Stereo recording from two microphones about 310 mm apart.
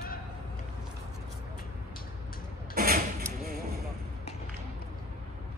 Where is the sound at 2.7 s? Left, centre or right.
Right.